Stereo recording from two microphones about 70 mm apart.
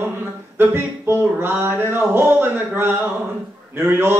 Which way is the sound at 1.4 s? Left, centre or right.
Right.